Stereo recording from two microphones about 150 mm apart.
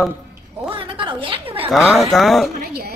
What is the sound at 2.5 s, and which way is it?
Speech, 85° right.